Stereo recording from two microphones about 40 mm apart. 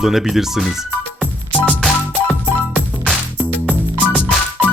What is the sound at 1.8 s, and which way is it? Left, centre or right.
Music, centre.